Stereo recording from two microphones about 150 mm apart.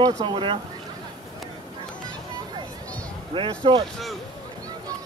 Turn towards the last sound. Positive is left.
turn(degrees=-35)  # may be behind; listen again after turning